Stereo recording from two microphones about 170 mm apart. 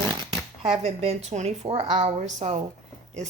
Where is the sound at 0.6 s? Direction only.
35° right (ahead or behind).